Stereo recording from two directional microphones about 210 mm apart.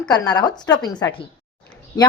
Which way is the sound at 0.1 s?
20° left (ahead or behind).